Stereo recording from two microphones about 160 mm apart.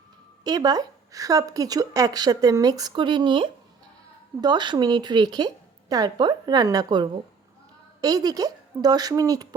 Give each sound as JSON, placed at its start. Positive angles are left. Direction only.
{"t": 0.4, "sound": "speech", "side_deg": -25}